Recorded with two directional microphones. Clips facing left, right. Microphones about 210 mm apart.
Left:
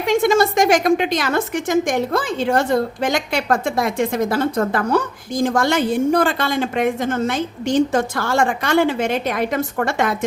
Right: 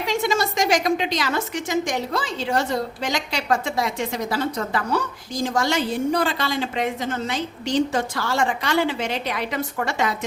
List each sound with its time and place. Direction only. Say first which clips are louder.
0.0 s a woman's voice: left 7 dB; 50° left (ahead or behind)